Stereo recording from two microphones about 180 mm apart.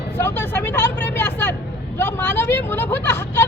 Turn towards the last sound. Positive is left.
turn(degrees=15)  # may be behind; listen again after turning